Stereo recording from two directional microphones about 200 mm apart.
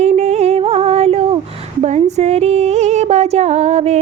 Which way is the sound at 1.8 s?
35° right (ahead or behind).